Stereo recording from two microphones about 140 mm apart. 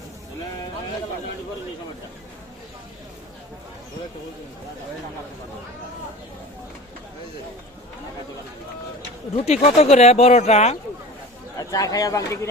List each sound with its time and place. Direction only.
9.3 s speech: 50° left (ahead or behind)
11.7 s speech: 25° left (ahead or behind)